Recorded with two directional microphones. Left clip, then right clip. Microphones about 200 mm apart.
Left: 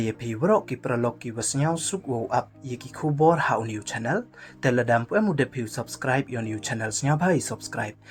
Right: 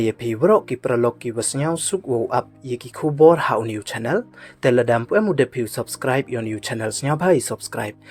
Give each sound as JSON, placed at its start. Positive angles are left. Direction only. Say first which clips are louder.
{"t": 0.0, "sound": "speech", "louder": "right 8 dB", "side_deg": -35}